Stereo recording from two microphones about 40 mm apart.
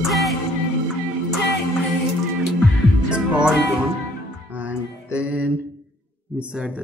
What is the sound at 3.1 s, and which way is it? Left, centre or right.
Music, right.